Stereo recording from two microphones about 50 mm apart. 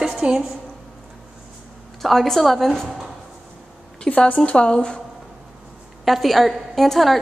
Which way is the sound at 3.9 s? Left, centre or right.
Left.